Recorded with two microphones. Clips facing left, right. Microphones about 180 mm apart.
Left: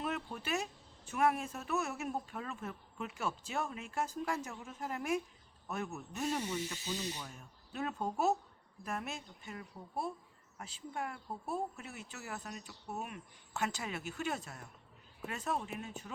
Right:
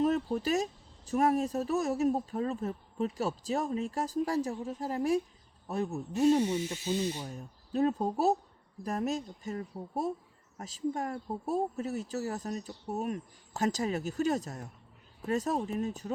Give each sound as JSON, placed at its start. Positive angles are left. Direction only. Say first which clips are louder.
{"t": 0.0, "sound": "speech", "louder": "right 11 dB", "side_deg": -40}